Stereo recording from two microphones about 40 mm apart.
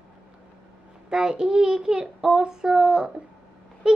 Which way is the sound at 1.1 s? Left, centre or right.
Centre.